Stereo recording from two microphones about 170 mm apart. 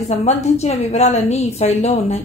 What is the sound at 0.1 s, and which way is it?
A woman's voice, 40° left (ahead or behind).